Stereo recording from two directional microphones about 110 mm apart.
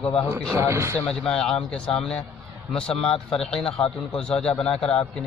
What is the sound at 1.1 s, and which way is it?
A man's voice, 5° left (ahead or behind).